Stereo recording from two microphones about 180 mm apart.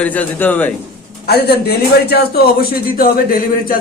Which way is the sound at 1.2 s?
60° left (ahead or behind).